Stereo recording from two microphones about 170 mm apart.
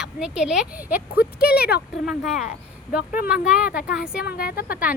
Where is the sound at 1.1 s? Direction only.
65° left (ahead or behind).